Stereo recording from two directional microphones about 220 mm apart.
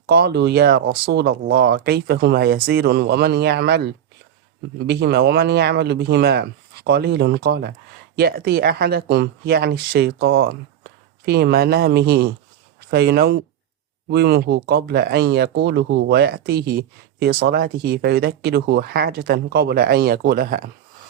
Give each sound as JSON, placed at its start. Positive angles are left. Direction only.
{"t": 0.0, "sound": "speech", "side_deg": -45}